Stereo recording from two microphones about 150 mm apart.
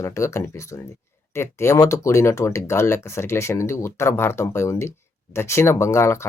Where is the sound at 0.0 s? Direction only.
20° left (ahead or behind).